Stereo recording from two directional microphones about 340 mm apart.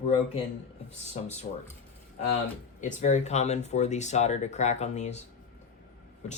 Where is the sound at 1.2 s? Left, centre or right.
Centre.